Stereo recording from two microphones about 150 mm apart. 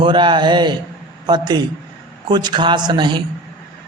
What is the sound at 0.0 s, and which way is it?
A man's voice, 30° right (ahead or behind).